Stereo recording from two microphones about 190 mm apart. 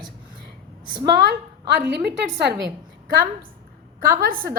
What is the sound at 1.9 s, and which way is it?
Speech, 60° right (ahead or behind).